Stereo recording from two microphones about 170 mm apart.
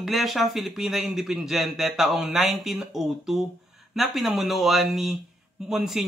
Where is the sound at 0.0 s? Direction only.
Centre (ahead or behind).